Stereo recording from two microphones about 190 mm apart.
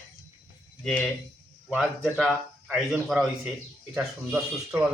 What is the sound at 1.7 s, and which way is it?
Speech, 5° right (ahead or behind).